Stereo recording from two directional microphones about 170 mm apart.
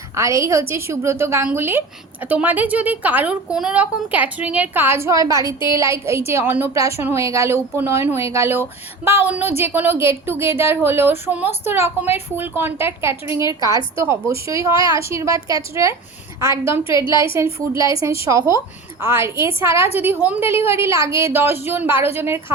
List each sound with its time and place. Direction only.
0.2 s a woman's voice: 20° right (ahead or behind)
17.3 s a woman's voice: 15° right (ahead or behind)